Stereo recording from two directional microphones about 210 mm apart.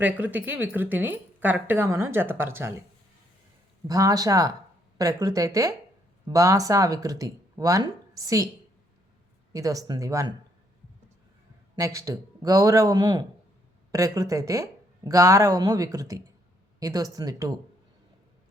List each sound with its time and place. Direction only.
0.0 s speech: 10° right (ahead or behind)
3.8 s speech: 15° right (ahead or behind)
9.5 s speech: 15° right (ahead or behind)
11.8 s speech: 15° right (ahead or behind)